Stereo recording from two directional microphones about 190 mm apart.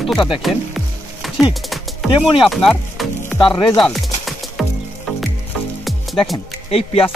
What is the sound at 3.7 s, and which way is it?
Music, centre (ahead or behind).